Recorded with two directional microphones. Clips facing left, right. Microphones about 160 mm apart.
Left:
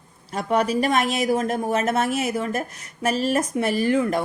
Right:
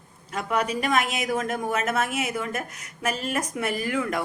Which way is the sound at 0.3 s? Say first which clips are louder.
Left 5 dB; 35° left (ahead or behind).